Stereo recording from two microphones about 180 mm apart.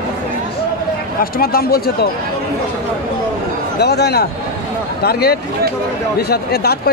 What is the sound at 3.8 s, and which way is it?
Speech, 65° left (ahead or behind).